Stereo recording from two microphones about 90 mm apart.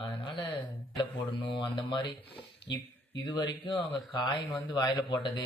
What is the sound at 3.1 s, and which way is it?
Speech, 55° left (ahead or behind).